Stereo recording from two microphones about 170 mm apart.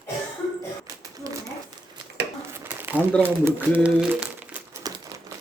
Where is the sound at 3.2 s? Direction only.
10° right (ahead or behind).